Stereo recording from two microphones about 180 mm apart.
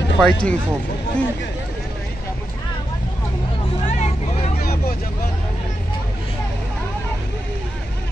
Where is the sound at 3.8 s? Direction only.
40° left (ahead or behind).